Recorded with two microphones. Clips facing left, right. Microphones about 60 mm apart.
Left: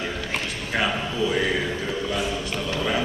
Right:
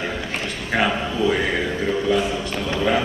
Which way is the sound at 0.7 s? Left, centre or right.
Right.